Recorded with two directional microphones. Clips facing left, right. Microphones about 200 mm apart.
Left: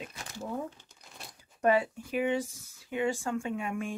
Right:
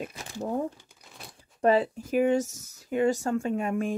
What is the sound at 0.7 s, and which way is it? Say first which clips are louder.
Crumpling: right 2 dB; 5° right (ahead or behind).